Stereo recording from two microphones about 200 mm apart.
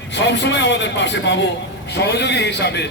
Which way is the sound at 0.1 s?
60° left (ahead or behind).